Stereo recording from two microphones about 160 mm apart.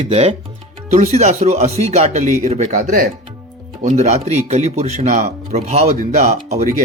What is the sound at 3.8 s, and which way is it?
Speech, 45° right (ahead or behind).